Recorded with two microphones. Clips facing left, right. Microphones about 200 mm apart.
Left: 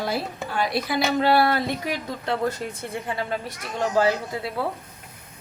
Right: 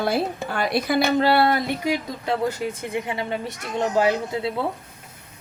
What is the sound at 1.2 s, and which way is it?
Speech, 30° right (ahead or behind).